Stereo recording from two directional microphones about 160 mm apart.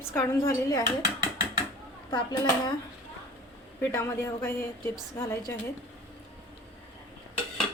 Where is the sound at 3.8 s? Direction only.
15° left (ahead or behind).